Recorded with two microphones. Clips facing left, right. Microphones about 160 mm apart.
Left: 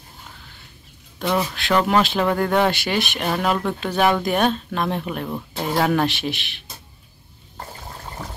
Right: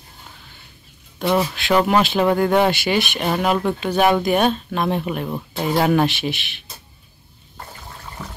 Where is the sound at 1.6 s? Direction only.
5° right (ahead or behind).